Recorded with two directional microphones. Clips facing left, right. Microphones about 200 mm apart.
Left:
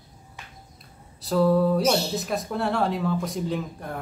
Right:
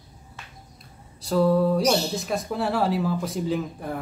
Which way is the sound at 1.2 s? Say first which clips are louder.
Even; centre (ahead or behind).